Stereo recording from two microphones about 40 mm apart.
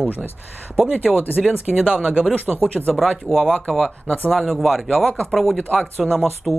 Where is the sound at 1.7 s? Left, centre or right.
Right.